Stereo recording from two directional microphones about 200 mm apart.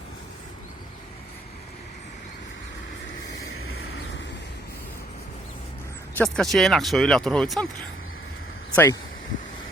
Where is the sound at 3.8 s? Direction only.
70° left (ahead or behind).